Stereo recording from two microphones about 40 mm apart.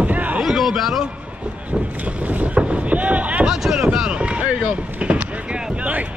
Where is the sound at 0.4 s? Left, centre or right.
Centre.